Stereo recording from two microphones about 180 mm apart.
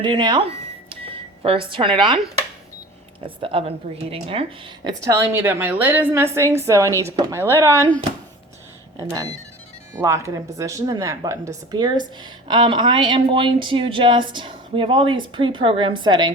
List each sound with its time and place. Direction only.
0.0 s cash register: 25° right (ahead or behind)
3.2 s a woman's voice: 30° right (ahead or behind)
5.0 s a woman's voice: 10° right (ahead or behind)
7.8 s speech: 10° left (ahead or behind)
9.9 s a woman's voice: 15° right (ahead or behind)